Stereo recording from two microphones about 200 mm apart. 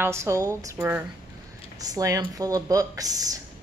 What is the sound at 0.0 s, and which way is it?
Speech, 15° right (ahead or behind).